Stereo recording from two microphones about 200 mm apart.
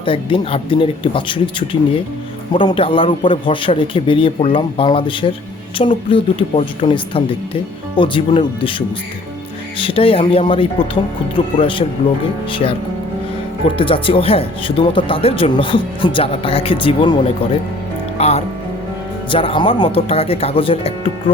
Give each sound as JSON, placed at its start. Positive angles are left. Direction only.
{"t": 0.0, "sound": "speech", "side_deg": 25}
{"t": 9.7, "sound": "speech", "side_deg": 25}